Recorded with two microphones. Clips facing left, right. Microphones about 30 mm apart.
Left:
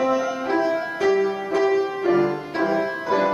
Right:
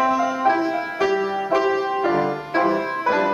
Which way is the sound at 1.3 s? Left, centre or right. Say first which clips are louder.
Right 1 dB; centre.